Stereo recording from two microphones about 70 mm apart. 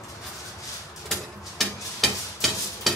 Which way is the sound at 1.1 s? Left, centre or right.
Centre.